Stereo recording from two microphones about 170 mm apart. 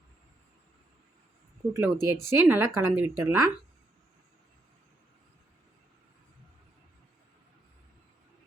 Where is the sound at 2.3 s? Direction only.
15° right (ahead or behind).